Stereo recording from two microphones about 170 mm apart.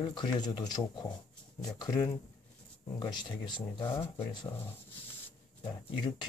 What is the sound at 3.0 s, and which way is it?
Speech, 25° left (ahead or behind).